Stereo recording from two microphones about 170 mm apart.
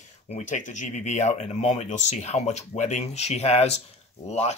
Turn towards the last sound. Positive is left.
turn(degrees=40)  # may be behind; listen again after turning